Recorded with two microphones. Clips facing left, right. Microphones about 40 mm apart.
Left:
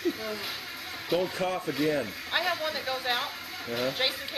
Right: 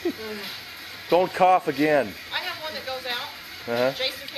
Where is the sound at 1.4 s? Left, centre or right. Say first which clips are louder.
Right 13 dB; right.